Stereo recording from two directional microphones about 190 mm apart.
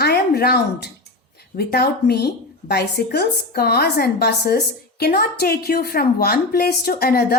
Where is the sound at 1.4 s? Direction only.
60° left (ahead or behind).